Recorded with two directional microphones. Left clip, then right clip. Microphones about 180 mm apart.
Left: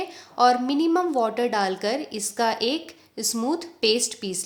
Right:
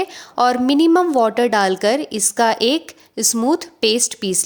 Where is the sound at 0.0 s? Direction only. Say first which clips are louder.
Right 3 dB; 45° right (ahead or behind).